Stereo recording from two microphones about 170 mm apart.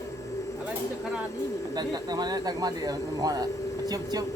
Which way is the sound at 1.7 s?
25° right (ahead or behind).